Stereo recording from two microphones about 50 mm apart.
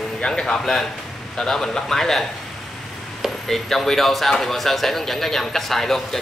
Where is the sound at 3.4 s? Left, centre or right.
Centre.